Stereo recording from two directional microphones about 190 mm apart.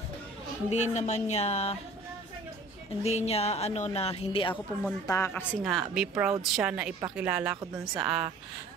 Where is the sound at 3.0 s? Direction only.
35° left (ahead or behind).